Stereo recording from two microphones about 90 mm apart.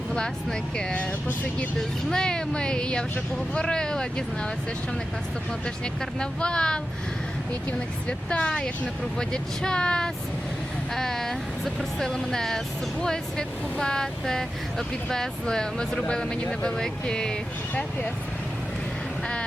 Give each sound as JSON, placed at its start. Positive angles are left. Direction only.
{"t": 0.1, "sound": "speech", "side_deg": 10}
{"t": 2.0, "sound": "speech", "side_deg": 10}
{"t": 5.6, "sound": "speech", "side_deg": 10}